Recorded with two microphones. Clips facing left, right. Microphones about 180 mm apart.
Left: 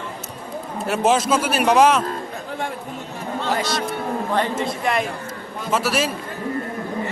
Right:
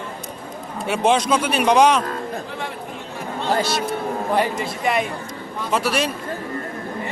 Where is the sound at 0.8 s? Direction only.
Centre (ahead or behind).